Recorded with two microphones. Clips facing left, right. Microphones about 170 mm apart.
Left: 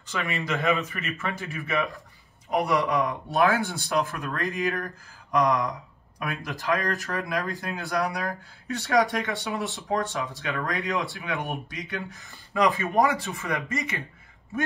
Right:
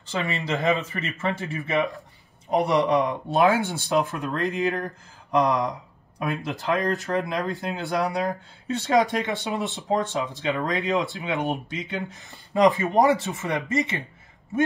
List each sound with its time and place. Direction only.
0.1 s speech: 20° right (ahead or behind)